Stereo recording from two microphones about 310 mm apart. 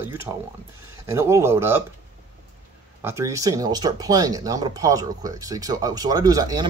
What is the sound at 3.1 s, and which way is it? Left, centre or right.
Speech, centre.